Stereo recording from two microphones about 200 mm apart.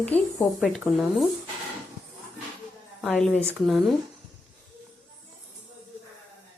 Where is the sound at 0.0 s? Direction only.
5° left (ahead or behind).